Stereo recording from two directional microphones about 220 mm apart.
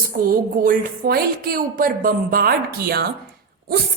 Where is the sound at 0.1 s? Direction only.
40° right (ahead or behind).